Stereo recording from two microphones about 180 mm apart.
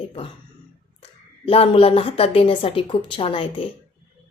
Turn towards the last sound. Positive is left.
turn(degrees=30)  # may be behind; listen again after turning